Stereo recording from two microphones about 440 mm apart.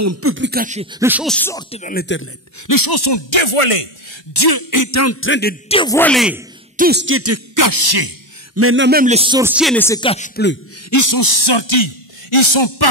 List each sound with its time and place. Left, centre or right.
0.0 s speech: right; by 2.2 s left
2.6 s a sound: left
4.3 s speech: left; by 6.4 s centre
6.8 s throat clearing: right
8.5 s speech: right; by 10.6 s left
10.9 s speech: left